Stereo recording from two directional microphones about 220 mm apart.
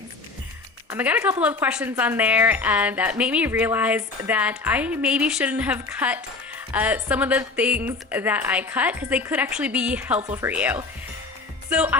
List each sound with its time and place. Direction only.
0.9 s speech: 10° right (ahead or behind)